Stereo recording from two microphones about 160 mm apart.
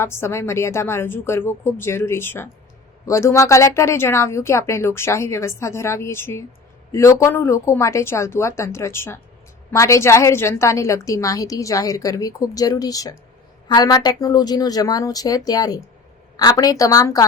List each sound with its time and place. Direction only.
0.0 s a woman's voice: 15° left (ahead or behind)